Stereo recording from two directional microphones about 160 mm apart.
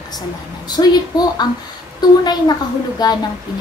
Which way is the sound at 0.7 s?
25° left (ahead or behind).